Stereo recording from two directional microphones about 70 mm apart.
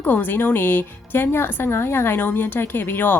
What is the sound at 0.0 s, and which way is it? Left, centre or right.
A woman's voice, left.